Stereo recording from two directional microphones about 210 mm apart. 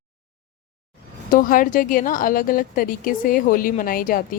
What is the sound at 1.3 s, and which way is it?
A woman's voice, 40° left (ahead or behind).